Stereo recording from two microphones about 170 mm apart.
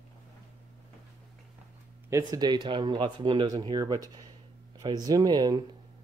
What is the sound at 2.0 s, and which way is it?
Speech, 20° right (ahead or behind).